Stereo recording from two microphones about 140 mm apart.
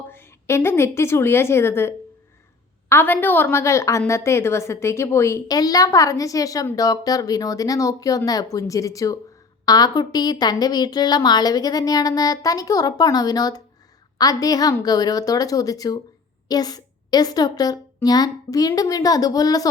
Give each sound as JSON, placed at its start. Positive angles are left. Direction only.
{"t": 0.1, "sound": "a woman's voice", "side_deg": 15}
{"t": 2.9, "sound": "a woman's voice", "side_deg": 15}